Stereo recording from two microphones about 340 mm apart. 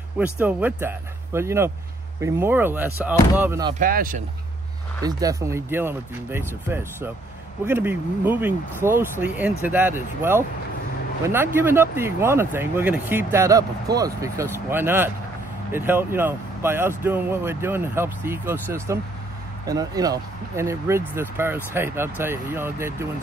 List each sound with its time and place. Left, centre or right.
0.2 s speech: centre
3.8 s speech: right
5.0 s speech: centre